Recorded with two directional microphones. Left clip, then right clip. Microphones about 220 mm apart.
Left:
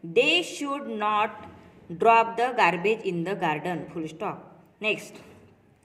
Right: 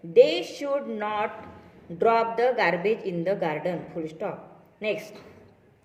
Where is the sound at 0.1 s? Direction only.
40° left (ahead or behind).